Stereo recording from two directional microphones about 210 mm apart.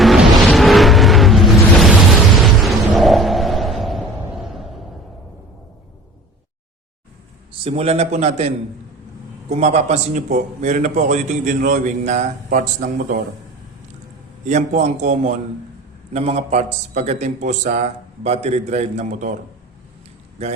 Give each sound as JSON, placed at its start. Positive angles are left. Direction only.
{"t": 0.0, "sound": "a sound", "side_deg": 0}
{"t": 7.6, "sound": "a man's voice", "side_deg": -30}
{"t": 14.4, "sound": "a man's voice", "side_deg": -35}